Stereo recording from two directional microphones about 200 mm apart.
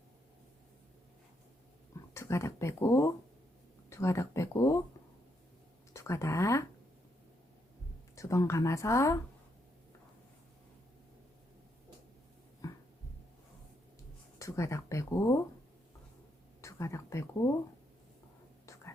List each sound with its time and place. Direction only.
2.1 s speech: 15° left (ahead or behind)
5.9 s speech: 15° left (ahead or behind)
8.1 s speech: 15° left (ahead or behind)
12.6 s a sound: 15° left (ahead or behind)
14.3 s speech: 15° left (ahead or behind)
16.6 s speech: 15° left (ahead or behind)